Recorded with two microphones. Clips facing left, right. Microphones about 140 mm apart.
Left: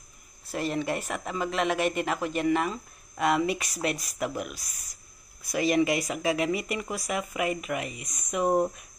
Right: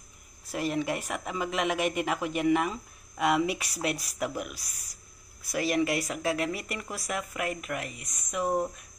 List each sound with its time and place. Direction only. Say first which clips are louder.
0.5 s speech: left 1 dB; 10° right (ahead or behind)
5.9 s speech: left 2 dB; 10° left (ahead or behind)
8.5 s speech: left 4 dB; 15° left (ahead or behind)